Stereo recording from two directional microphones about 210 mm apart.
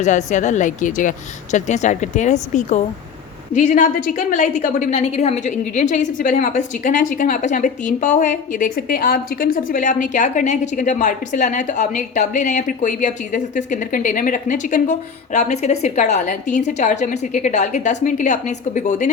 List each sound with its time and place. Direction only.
0.0 s a woman's voice: 35° left (ahead or behind)